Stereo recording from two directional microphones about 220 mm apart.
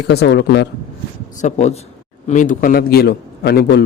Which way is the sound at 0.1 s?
50° left (ahead or behind).